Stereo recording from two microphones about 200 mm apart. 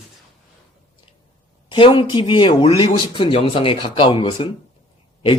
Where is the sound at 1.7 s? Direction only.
25° left (ahead or behind).